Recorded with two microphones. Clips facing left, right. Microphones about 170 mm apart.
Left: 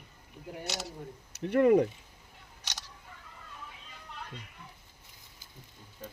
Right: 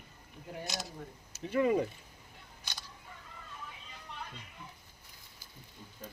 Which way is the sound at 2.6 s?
80° left.